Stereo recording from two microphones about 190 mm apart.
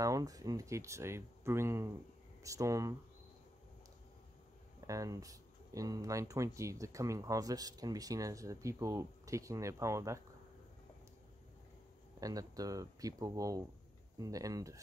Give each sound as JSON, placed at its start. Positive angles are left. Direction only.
{"t": 0.0, "sound": "speech", "side_deg": -20}
{"t": 4.7, "sound": "speech", "side_deg": -15}
{"t": 12.2, "sound": "speech", "side_deg": -20}